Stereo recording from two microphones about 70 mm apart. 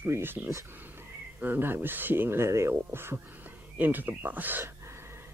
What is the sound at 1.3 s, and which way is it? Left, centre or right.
A man's voice, right.